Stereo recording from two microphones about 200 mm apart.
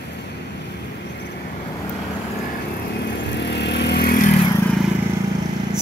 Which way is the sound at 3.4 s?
60° left (ahead or behind).